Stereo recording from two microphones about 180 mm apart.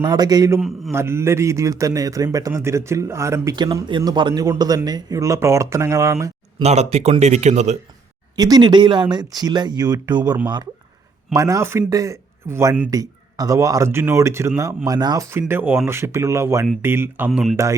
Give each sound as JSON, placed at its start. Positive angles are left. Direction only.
{"t": 0.0, "sound": "a man's voice", "side_deg": -20}
{"t": 6.6, "sound": "speech", "side_deg": -35}
{"t": 8.4, "sound": "a man's voice", "side_deg": -20}